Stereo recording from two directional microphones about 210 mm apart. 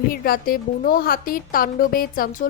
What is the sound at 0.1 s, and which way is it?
Speech, 45° left (ahead or behind).